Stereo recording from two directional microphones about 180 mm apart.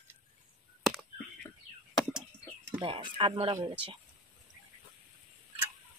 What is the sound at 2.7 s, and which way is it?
Speech, 25° right (ahead or behind).